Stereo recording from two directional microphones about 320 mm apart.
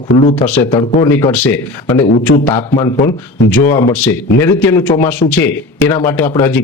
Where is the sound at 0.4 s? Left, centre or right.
Centre.